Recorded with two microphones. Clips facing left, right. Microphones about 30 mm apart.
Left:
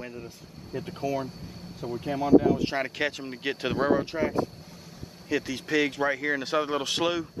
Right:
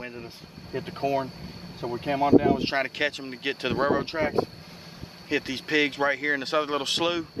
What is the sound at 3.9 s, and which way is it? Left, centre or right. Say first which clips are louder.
Speech: right 1 dB; right.